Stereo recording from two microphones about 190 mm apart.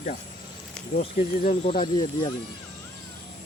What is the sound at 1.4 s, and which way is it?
Speech, 30° left (ahead or behind).